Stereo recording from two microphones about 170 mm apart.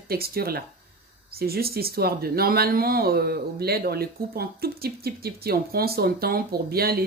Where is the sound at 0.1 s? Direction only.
65° right (ahead or behind).